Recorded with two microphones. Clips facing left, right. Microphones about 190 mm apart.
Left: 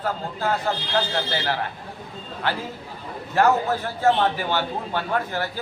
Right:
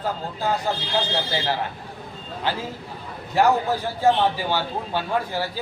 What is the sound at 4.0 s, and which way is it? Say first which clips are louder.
A man's voice: right 1 dB; 10° right (ahead or behind).